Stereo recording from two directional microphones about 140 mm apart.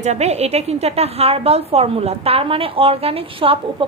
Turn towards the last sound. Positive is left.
turn(degrees=-40)  # may be behind; listen again after turning